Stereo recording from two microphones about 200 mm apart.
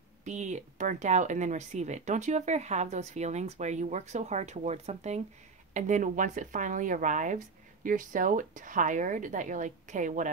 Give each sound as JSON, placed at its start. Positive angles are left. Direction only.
{"t": 0.2, "sound": "speech", "side_deg": -35}